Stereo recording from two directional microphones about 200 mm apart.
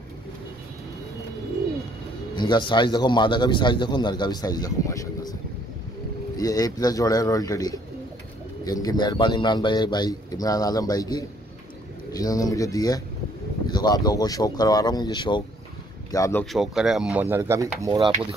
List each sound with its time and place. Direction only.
2.3 s speech: 25° left (ahead or behind)
6.3 s speech: 20° left (ahead or behind)
16.5 s speech: centre (ahead or behind)
17.9 s speech: 25° right (ahead or behind)